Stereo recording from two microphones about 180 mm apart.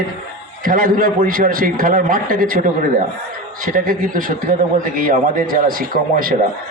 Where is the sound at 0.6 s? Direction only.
50° right (ahead or behind).